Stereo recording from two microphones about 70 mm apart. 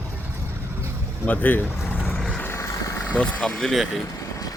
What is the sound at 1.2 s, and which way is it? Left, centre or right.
Speech, left.